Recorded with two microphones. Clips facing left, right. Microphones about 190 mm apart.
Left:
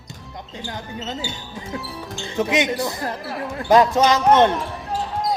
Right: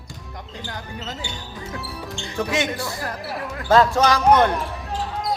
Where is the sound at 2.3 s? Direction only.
20° left (ahead or behind).